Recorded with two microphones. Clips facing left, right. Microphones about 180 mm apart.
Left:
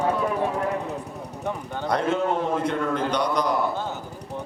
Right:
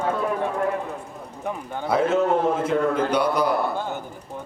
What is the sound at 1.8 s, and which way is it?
A man's voice, 5° right (ahead or behind).